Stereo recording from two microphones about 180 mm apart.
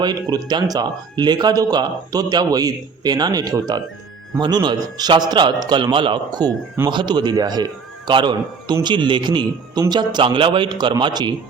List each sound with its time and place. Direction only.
0.0 s a man's voice: 25° right (ahead or behind)